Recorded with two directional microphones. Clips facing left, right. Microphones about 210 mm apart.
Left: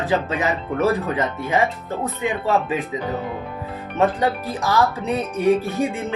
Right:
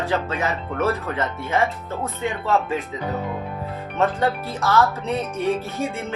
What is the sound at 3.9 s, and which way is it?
Speech, 15° left (ahead or behind).